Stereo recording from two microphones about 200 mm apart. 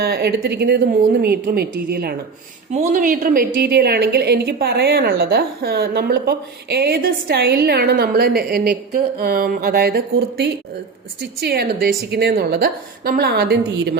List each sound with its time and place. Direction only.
0.0 s a woman's voice: 55° right (ahead or behind)